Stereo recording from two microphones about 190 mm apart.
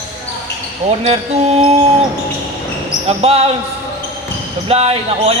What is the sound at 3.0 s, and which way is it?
Speech, 35° right (ahead or behind).